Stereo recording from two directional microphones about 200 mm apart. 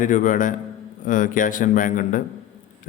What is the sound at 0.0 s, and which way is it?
A man's voice, 40° left (ahead or behind).